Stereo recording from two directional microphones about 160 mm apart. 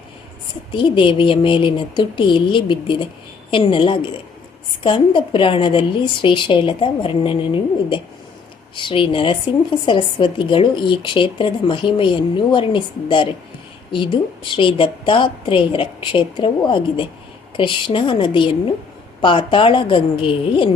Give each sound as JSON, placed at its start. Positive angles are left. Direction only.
{"t": 0.7, "sound": "speech", "side_deg": 30}